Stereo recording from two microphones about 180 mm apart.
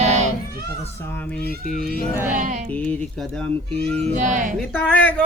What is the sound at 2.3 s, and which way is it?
Speech, 45° right (ahead or behind).